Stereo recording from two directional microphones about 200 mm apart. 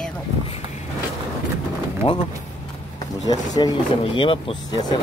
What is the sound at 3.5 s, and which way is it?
Speech, 20° left (ahead or behind).